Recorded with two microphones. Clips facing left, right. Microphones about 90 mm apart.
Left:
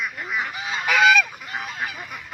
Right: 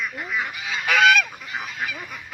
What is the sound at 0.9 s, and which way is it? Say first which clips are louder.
Goose: even; centre (ahead or behind).